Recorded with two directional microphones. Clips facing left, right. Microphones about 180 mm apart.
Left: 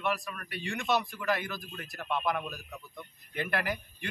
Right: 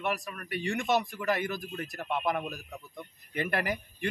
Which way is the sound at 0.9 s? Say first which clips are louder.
Even; 45° right (ahead or behind).